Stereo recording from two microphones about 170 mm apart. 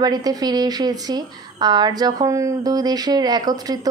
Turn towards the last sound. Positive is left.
turn(degrees=-25)  # may be behind; listen again after turning